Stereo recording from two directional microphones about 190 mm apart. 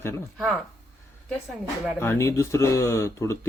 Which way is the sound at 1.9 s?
15° left (ahead or behind).